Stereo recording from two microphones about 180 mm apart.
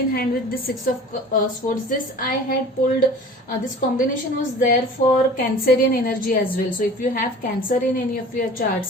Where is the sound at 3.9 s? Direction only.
50° left (ahead or behind).